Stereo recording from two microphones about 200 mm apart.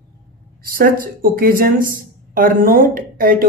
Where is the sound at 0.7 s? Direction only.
45° right (ahead or behind).